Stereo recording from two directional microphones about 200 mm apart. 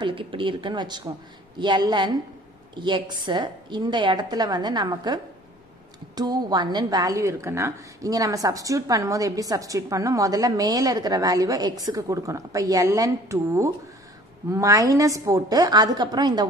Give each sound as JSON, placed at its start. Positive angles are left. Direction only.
{"t": 0.0, "sound": "a woman's voice", "side_deg": -25}